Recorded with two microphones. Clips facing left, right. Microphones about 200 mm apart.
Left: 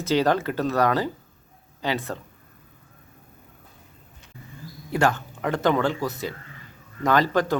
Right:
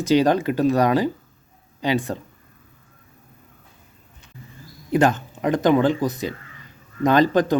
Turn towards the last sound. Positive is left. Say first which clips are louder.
# right 4 dB
turn(degrees=-20)  # may be behind; listen again after turning